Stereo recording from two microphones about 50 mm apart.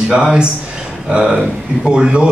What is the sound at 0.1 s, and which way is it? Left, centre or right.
Speech, centre.